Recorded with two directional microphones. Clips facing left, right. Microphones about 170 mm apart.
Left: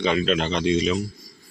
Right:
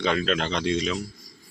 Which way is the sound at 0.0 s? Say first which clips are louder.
Left 3 dB; 5° left (ahead or behind).